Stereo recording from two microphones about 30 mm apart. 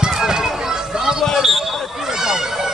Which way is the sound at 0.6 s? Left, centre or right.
Centre.